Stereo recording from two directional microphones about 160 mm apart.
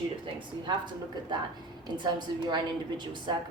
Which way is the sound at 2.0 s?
30° right (ahead or behind).